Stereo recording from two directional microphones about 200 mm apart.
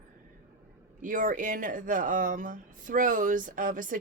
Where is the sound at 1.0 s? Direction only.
40° right (ahead or behind).